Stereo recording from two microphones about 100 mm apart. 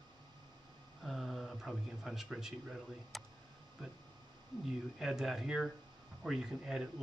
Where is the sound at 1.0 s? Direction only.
Centre (ahead or behind).